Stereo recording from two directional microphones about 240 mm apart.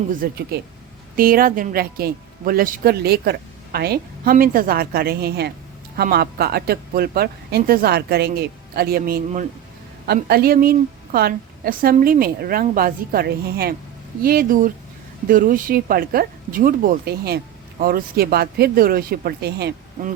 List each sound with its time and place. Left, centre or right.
0.1 s speech: right